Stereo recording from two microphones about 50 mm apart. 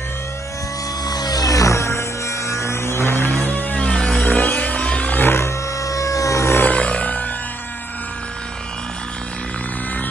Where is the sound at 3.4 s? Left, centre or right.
Left.